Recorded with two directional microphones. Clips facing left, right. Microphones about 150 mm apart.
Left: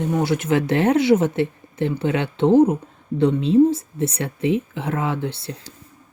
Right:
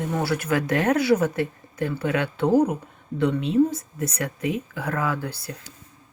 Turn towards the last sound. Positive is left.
turn(degrees=25)  # may be behind; listen again after turning